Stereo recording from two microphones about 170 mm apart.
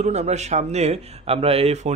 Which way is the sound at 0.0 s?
40° right (ahead or behind).